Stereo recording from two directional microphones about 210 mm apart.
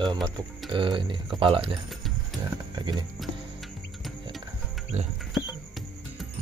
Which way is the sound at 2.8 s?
20° right (ahead or behind).